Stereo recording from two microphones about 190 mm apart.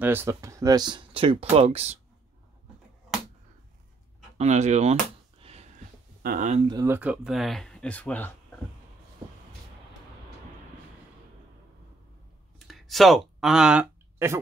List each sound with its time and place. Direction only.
0.0 s speech: 10° right (ahead or behind); by 2.0 s 30° right (ahead or behind)
4.4 s speech: 35° right (ahead or behind)
5.4 s a sound: 30° right (ahead or behind)
6.2 s speech: 45° right (ahead or behind)
6.7 s speech: 15° right (ahead or behind); by 8.5 s 5° left (ahead or behind)
12.5 s a sound: centre (ahead or behind)